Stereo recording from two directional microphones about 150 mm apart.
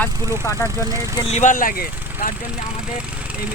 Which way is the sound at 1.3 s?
50° left (ahead or behind).